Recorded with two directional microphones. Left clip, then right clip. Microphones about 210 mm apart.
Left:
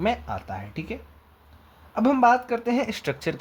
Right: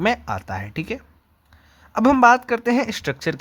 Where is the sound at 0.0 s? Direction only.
25° right (ahead or behind).